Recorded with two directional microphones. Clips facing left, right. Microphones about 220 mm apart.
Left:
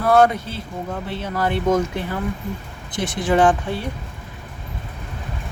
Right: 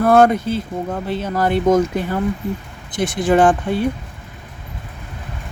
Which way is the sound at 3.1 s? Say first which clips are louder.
Right 3 dB; 45° right (ahead or behind).